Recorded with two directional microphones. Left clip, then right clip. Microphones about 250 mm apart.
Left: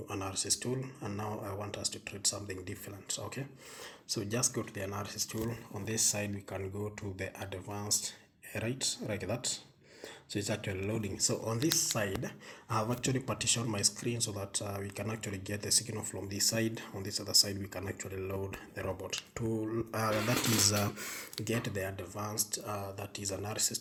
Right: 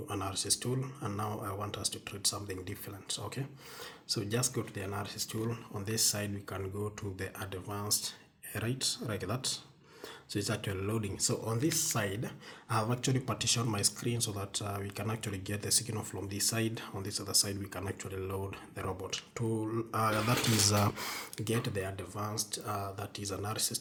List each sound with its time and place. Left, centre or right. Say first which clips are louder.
0.1 s speech: right 1 dB; centre